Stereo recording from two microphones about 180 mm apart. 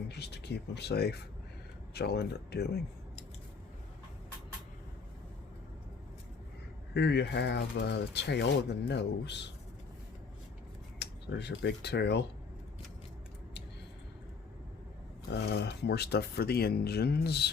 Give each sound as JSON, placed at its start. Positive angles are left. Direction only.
{"t": 0.1, "sound": "speech", "side_deg": 65}
{"t": 6.9, "sound": "speech", "side_deg": 70}
{"t": 11.0, "sound": "speech", "side_deg": 70}
{"t": 15.3, "sound": "speech", "side_deg": 65}